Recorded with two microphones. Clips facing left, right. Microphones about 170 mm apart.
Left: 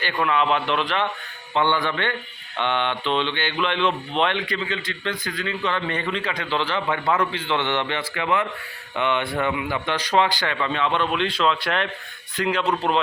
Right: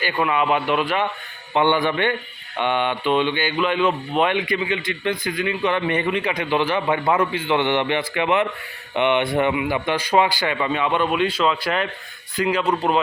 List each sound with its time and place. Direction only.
0.0 s speech: 10° right (ahead or behind)